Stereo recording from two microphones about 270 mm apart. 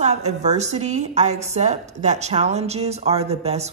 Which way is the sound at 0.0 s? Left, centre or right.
Right.